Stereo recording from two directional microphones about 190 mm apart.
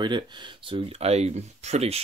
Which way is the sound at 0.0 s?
25° right (ahead or behind).